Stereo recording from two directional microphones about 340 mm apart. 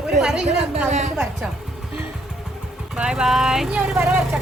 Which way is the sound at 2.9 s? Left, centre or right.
Centre.